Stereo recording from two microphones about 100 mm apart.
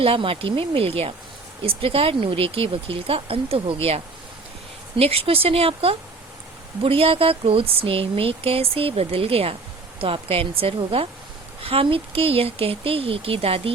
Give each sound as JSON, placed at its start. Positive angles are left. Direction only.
{"t": 0.0, "sound": "speech", "side_deg": -65}
{"t": 4.9, "sound": "speech", "side_deg": -85}